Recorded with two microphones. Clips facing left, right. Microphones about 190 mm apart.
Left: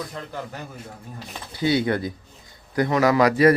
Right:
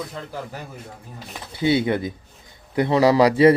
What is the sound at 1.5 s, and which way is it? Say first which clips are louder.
Speech: right 2 dB; 25° right (ahead or behind).